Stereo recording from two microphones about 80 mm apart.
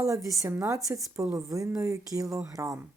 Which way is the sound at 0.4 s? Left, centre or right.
Right.